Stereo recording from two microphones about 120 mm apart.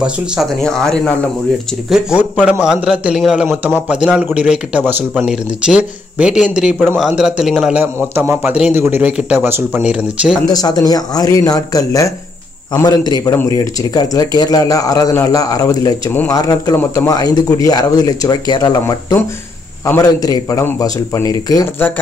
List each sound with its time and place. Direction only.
0.0 s speech: centre (ahead or behind)
1.9 s speech: 5° right (ahead or behind)
7.8 s a man's voice: 20° right (ahead or behind)
10.5 s a man's voice: 30° left (ahead or behind)
21.7 s speech: 15° left (ahead or behind)